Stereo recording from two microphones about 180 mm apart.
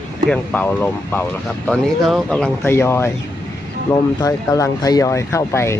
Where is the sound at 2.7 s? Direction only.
15° left (ahead or behind).